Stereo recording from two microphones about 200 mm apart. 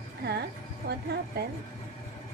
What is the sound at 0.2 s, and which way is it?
Music, 55° right (ahead or behind).